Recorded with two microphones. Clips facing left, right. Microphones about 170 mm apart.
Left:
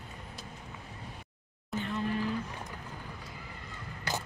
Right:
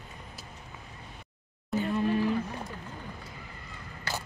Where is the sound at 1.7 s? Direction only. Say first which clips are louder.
Right 6 dB; centre (ahead or behind).